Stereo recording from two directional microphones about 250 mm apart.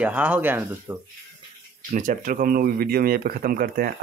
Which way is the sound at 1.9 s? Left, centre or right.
Right.